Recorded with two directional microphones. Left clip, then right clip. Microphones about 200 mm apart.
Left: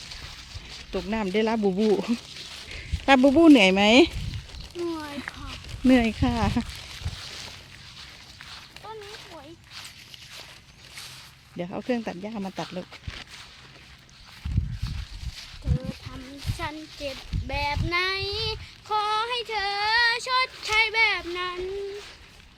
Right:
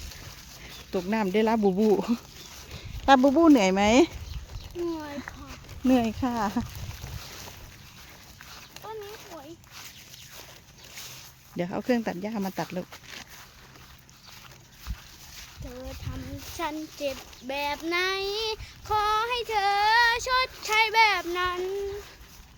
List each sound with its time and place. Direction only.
0.9 s speech: 10° right (ahead or behind)
3.2 s speech: 15° left (ahead or behind)
4.8 s a sound: 5° left (ahead or behind)
11.5 s speech: 15° right (ahead or behind)
16.6 s a sound: 45° right (ahead or behind)
17.2 s child singing: 35° right (ahead or behind)